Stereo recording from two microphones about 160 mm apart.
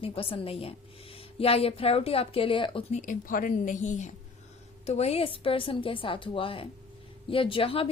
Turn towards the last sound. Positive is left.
turn(degrees=35)  # may be behind; listen again after turning